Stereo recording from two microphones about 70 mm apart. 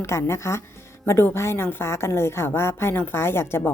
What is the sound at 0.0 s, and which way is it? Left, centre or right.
A woman's voice, left.